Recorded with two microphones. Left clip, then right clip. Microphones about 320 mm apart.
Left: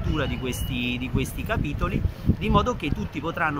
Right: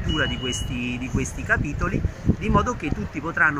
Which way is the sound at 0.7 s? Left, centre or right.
Left.